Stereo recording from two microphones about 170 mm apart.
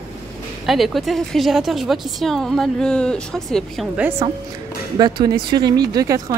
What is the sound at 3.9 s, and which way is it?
Speech, 10° right (ahead or behind).